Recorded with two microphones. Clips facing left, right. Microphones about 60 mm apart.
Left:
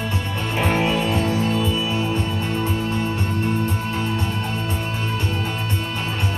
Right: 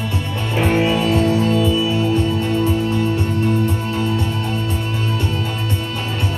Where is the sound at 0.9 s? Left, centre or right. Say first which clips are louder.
Right 4 dB; left.